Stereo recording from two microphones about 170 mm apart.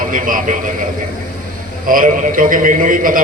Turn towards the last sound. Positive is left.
turn(degrees=-55)  # may be behind; listen again after turning